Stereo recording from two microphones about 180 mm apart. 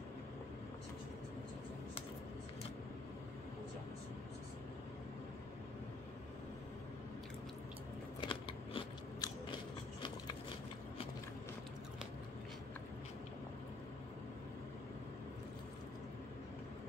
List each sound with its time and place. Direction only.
8.2 s biting: 30° left (ahead or behind)